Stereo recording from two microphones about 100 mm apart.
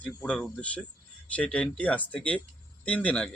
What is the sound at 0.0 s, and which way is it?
Speech, 15° left (ahead or behind).